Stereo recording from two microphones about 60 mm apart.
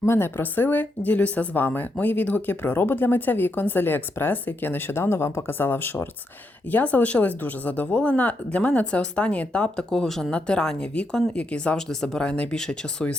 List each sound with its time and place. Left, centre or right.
0.0 s speech: left
1.6 s speech: left; by 13.1 s centre